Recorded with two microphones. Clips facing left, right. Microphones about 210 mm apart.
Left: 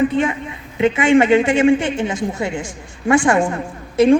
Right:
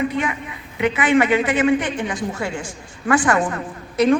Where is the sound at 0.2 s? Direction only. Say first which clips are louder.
Left 5 dB; 30° left (ahead or behind).